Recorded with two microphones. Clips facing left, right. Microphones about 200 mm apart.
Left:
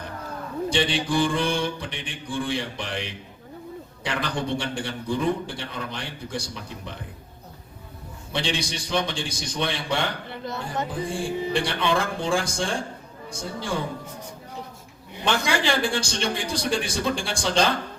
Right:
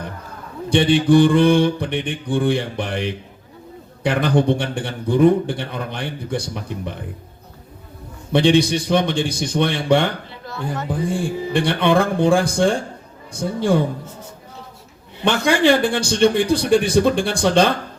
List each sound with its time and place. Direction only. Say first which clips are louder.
0.7 s a man's voice: right 11 dB; 55° right (ahead or behind)
8.3 s a man's voice: right 13 dB; 60° right (ahead or behind)
10.4 s speech: right 2 dB; 20° left (ahead or behind)
11.5 s a man's voice: right 9 dB; 55° right (ahead or behind)
15.2 s a man's voice: right 8 dB; 60° right (ahead or behind)